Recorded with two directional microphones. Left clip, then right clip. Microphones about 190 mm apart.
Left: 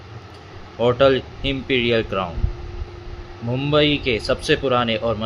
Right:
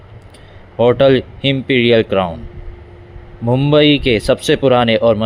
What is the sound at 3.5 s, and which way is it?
Speech, 40° right (ahead or behind).